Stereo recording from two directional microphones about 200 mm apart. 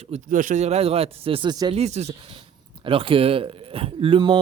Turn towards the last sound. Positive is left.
turn(degrees=-25)  # may be behind; listen again after turning